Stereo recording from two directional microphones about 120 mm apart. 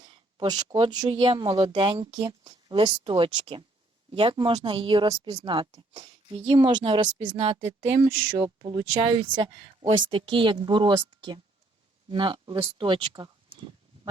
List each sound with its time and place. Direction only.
0.0 s a sound: 35° right (ahead or behind)
1.1 s a woman's voice: 45° right (ahead or behind); by 8.4 s 60° right (ahead or behind)
8.9 s a woman's voice: 45° right (ahead or behind)